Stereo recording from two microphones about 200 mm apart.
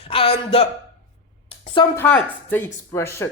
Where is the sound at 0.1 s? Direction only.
30° left (ahead or behind).